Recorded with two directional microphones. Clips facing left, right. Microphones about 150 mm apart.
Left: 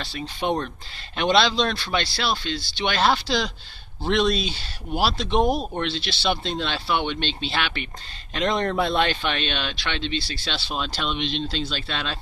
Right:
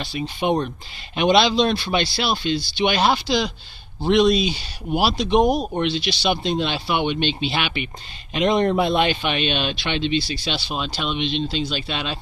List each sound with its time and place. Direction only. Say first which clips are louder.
0.0 s speech: right 4 dB; 20° right (ahead or behind)